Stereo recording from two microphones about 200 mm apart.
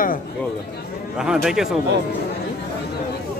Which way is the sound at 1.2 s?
5° right (ahead or behind).